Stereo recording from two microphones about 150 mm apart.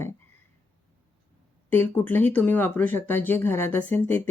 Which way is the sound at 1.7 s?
10° left (ahead or behind).